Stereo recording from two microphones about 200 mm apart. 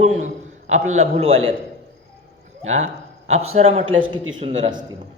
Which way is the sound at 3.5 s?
30° right (ahead or behind).